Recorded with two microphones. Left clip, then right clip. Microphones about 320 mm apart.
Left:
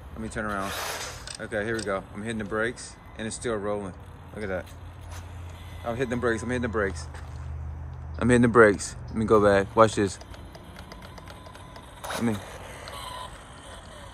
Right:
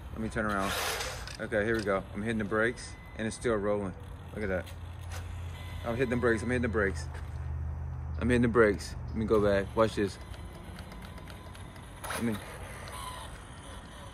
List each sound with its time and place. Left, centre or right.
0.2 s speech: centre
5.9 s speech: centre
8.2 s speech: centre
12.0 s a sound: centre